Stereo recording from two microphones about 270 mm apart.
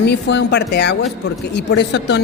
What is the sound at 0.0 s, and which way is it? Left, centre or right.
A woman's voice, left.